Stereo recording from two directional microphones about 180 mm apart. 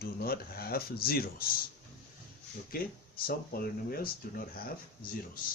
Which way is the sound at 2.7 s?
55° left (ahead or behind).